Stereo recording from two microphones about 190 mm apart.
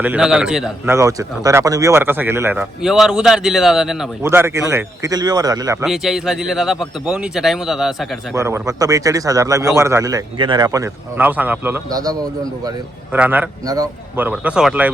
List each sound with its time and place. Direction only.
0.0 s a man's voice: 5° right (ahead or behind)
0.9 s speech: 15° right (ahead or behind)
4.2 s speech: 15° right (ahead or behind)
5.8 s a man's voice: centre (ahead or behind)
8.4 s speech: 15° right (ahead or behind)
13.1 s speech: 10° right (ahead or behind)
13.7 s a man's voice: 20° right (ahead or behind)
14.3 s speech: 5° right (ahead or behind)